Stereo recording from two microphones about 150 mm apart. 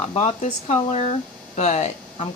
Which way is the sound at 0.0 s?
45° left (ahead or behind).